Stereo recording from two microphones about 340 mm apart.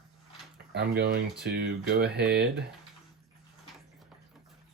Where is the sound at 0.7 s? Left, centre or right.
Right.